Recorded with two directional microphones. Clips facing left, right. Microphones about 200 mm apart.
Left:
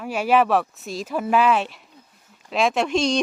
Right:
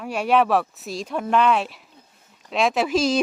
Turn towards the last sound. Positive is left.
turn(degrees=-5)  # may be behind; listen again after turning